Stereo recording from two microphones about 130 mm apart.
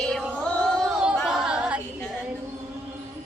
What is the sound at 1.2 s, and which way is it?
A capella, 5° right (ahead or behind).